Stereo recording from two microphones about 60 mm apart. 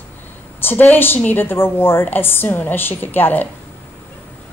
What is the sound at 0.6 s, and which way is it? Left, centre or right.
A woman's voice, left.